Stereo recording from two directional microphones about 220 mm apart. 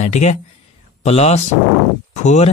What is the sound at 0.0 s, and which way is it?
A man's voice, 30° left (ahead or behind).